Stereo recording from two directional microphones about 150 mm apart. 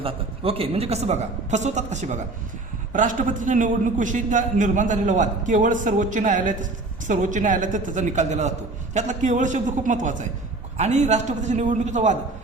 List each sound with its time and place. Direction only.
0.0 s a woman's voice: 40° right (ahead or behind)